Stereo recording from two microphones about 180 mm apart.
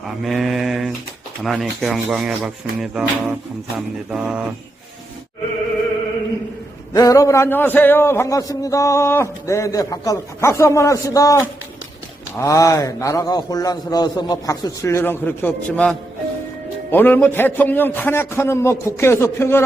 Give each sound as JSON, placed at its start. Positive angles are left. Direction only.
{"t": 0.0, "sound": "mantra", "side_deg": 0}
{"t": 1.5, "sound": "rub", "side_deg": 0}
{"t": 6.9, "sound": "a man's voice", "side_deg": 20}